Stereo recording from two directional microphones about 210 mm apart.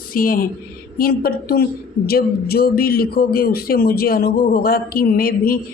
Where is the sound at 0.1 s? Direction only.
40° left (ahead or behind).